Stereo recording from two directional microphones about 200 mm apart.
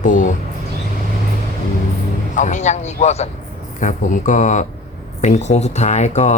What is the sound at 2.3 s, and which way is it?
Speech, 40° left (ahead or behind).